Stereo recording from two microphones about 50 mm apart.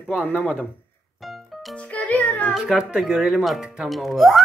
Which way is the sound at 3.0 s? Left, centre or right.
Centre.